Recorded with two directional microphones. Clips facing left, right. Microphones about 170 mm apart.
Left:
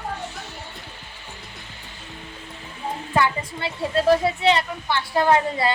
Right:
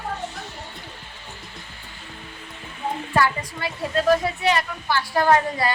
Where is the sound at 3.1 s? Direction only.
25° left (ahead or behind).